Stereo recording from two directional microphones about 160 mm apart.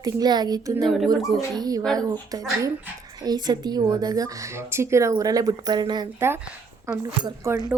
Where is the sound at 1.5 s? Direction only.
25° right (ahead or behind).